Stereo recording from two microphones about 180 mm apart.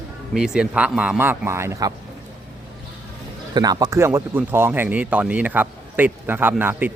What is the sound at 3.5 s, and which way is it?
Speech, 20° right (ahead or behind).